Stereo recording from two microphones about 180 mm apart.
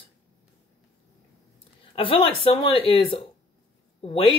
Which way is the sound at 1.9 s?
30° left (ahead or behind).